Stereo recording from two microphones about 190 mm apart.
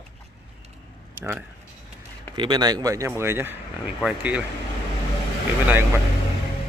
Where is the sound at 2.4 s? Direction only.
25° right (ahead or behind); by 4.4 s 5° right (ahead or behind).